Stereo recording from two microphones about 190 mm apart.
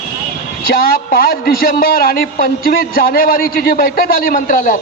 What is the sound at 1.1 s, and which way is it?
A man's voice, 50° left (ahead or behind).